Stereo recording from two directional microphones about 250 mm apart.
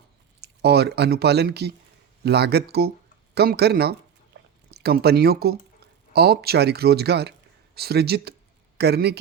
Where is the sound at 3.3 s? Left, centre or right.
Right.